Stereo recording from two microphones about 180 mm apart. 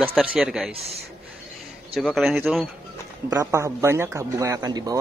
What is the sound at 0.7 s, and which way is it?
Speech, 35° right (ahead or behind).